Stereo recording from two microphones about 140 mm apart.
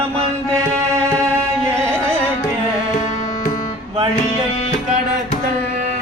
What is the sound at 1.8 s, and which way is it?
Carnatic music, 20° right (ahead or behind).